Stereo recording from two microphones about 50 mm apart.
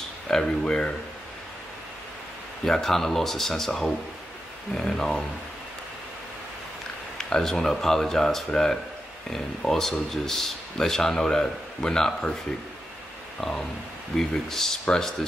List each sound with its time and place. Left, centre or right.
0.3 s a man's voice: centre
2.6 s a man's voice: centre
7.2 s a man's voice: centre
9.7 s a man's voice: centre
13.4 s a man's voice: centre